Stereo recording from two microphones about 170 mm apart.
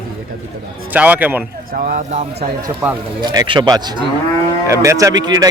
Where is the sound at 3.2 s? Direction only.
25° right (ahead or behind).